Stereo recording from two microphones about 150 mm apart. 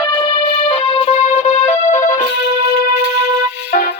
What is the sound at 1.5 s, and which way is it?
Music, 45° left (ahead or behind).